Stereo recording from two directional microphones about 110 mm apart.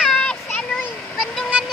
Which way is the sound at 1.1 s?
5° left (ahead or behind).